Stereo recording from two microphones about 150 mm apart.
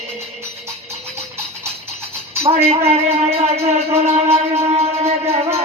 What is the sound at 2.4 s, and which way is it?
Music, 40° right (ahead or behind).